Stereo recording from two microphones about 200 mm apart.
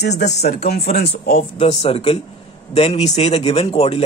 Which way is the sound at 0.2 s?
55° left (ahead or behind).